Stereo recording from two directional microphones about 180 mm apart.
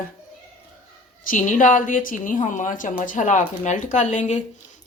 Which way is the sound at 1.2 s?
45° left (ahead or behind).